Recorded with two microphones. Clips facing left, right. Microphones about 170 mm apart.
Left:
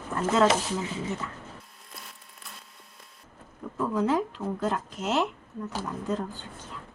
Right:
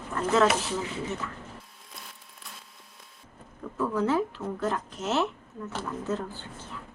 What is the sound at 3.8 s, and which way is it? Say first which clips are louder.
Speech: even; 15° left (ahead or behind).